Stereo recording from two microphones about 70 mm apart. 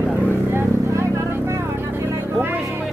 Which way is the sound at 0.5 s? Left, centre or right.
Right.